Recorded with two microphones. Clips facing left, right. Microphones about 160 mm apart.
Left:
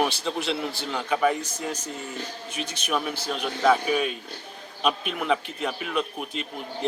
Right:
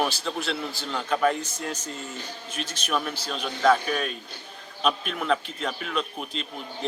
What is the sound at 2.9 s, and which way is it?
A man's voice, 10° left (ahead or behind).